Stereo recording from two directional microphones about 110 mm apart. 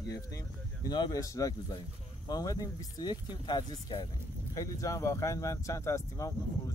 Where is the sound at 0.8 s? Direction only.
40° left (ahead or behind).